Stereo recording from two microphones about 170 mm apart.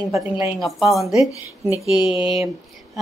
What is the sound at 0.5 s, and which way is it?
Speech, centre (ahead or behind).